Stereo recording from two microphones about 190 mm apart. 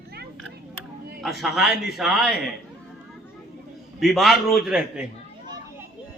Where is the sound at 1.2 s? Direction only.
Centre (ahead or behind).